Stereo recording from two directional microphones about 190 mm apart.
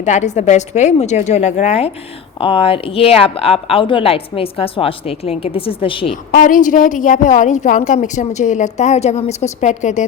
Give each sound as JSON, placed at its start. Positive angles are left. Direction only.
{"t": 0.0, "sound": "a woman's voice", "side_deg": 40}
{"t": 6.3, "sound": "a woman's voice", "side_deg": 45}